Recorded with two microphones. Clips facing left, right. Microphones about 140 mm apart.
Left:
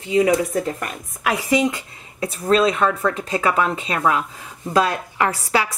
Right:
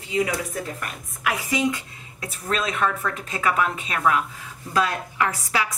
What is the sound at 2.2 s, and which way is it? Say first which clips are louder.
Speech: left 10 dB; 30° left (ahead or behind).